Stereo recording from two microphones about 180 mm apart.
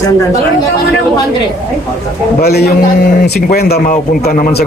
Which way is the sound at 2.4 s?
65° left (ahead or behind).